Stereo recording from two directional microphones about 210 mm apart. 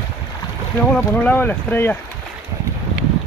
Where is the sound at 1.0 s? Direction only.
10° left (ahead or behind).